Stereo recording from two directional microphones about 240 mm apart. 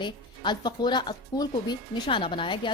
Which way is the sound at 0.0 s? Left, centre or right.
Centre.